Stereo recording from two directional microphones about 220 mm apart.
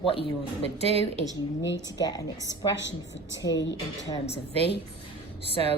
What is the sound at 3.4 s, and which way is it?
Speech, 55° left (ahead or behind).